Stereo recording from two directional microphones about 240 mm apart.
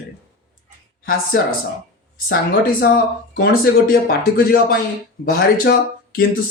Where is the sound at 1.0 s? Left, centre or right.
Left.